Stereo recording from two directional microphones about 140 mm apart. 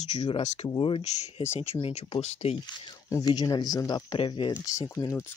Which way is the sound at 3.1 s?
30° left (ahead or behind).